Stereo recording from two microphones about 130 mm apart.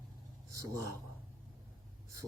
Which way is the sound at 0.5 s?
25° right (ahead or behind).